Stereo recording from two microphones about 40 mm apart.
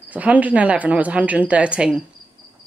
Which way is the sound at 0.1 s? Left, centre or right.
Right.